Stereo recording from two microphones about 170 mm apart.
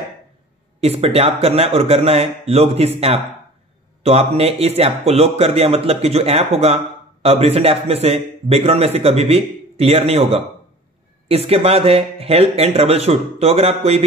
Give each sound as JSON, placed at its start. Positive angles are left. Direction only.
{"t": 0.7, "sound": "a man's voice", "side_deg": -35}